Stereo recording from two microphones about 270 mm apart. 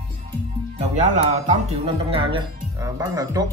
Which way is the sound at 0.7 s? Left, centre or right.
Right.